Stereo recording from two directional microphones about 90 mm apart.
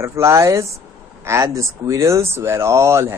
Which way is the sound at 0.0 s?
30° right (ahead or behind).